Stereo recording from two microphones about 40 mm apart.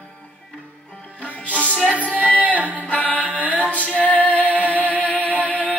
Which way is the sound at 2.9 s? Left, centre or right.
Left.